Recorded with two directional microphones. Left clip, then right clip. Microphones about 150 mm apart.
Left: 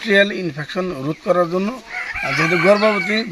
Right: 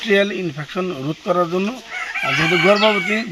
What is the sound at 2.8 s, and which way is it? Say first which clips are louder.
Speech: right 1 dB; 25° left (ahead or behind).